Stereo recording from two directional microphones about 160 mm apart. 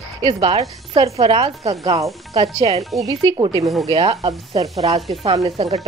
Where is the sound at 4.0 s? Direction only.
40° right (ahead or behind).